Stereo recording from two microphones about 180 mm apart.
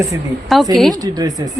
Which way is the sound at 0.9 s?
20° right (ahead or behind).